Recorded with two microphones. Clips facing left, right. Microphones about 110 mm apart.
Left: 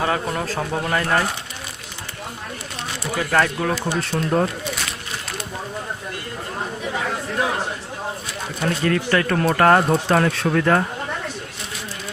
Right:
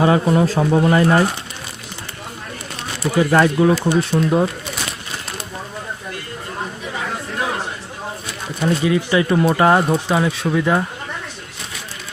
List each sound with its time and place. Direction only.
0.0 s speech: 15° right (ahead or behind)
3.2 s speech: 15° right (ahead or behind)
8.6 s speech: 10° right (ahead or behind)